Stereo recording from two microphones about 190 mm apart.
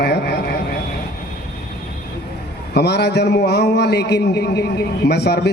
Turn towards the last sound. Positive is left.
turn(degrees=60)  # may be behind; listen again after turning